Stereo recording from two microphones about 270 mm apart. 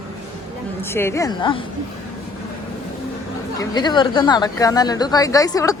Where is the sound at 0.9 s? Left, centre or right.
Centre.